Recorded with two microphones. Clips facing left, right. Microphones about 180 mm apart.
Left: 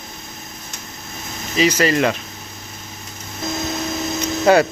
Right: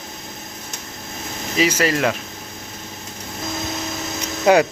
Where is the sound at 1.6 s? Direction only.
10° right (ahead or behind).